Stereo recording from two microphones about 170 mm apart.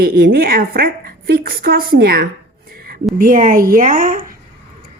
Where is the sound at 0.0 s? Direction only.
65° right (ahead or behind).